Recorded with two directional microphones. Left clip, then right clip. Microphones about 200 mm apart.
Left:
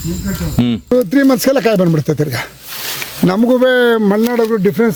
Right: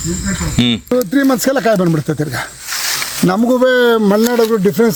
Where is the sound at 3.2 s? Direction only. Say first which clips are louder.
Left 1 dB; 30° left (ahead or behind); by 4.9 s centre (ahead or behind).